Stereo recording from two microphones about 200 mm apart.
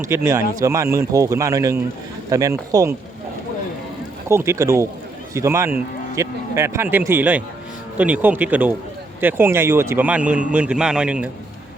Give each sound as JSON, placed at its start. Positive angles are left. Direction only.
{"t": 0.1, "sound": "a man's voice", "side_deg": -15}
{"t": 4.3, "sound": "a man's voice", "side_deg": -15}